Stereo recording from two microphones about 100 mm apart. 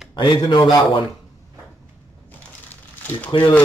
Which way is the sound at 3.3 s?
60° left (ahead or behind).